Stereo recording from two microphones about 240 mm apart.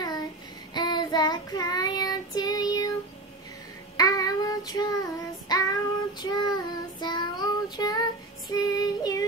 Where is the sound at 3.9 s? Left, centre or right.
Centre.